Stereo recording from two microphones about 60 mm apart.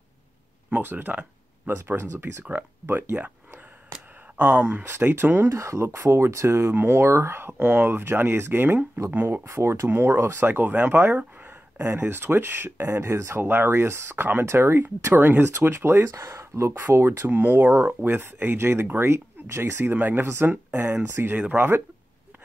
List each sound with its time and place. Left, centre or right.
0.7 s speech: right
4.6 s speech: right
4.9 s speech: right
5.5 s speech: right
6.7 s speech: right
9.5 s speech: right
14.4 s speech: right
16.1 s speech: right
17.3 s speech: right